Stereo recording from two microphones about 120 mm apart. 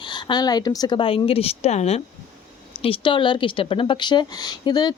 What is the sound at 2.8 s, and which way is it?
A woman's voice, 45° left (ahead or behind).